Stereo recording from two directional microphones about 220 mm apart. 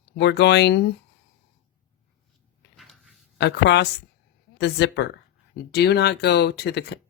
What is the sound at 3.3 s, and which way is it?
A woman's voice, 50° left (ahead or behind).